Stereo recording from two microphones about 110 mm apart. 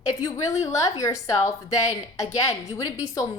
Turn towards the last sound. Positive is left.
turn(degrees=35)  # may be behind; listen again after turning